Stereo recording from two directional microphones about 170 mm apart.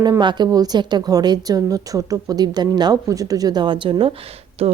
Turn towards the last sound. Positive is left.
turn(degrees=-35)  # may be behind; listen again after turning